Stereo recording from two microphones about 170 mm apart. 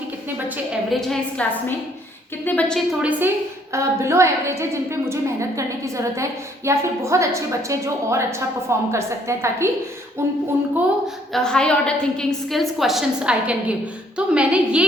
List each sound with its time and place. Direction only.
0.3 s a woman's voice: 10° right (ahead or behind); by 2.8 s 5° left (ahead or behind)
3.0 s a woman's voice: 10° right (ahead or behind)
11.0 s a woman's voice: centre (ahead or behind)